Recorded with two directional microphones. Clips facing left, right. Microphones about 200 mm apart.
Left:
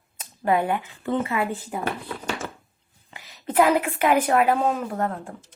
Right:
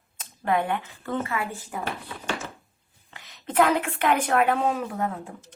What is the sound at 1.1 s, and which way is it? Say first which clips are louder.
Speech: left 4 dB; 20° left (ahead or behind).